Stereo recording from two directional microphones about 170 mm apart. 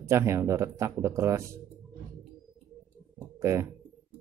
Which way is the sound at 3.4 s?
15° right (ahead or behind).